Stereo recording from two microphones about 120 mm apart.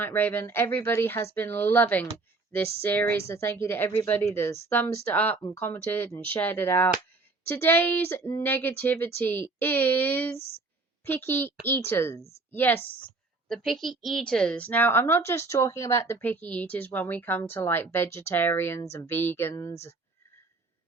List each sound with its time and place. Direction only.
0.0 s a woman's voice: 15° left (ahead or behind)
13.5 s a woman's voice: centre (ahead or behind); by 19.9 s 25° left (ahead or behind)